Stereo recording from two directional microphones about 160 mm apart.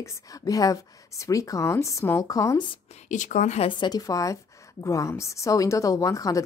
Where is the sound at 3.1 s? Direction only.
50° left (ahead or behind).